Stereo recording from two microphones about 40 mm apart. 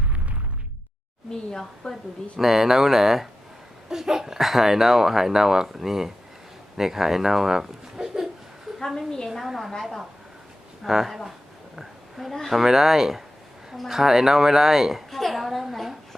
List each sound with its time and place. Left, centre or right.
1.3 s speech: centre
2.4 s speech: centre
9.0 s speech: centre
9.4 s a woman's voice: centre
10.8 s a woman's voice: centre
11.8 s a sound: centre
12.5 s a woman's voice: centre